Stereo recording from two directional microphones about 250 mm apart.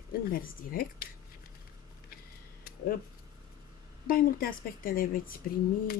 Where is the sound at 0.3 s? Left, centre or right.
Left.